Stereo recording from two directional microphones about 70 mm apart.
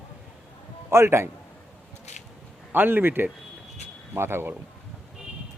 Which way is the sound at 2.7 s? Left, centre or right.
Right.